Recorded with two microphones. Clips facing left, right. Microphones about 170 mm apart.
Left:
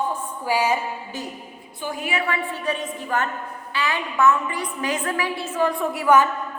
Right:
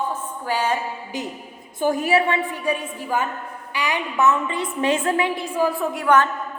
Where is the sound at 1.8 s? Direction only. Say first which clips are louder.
Right 9 dB; 45° right (ahead or behind).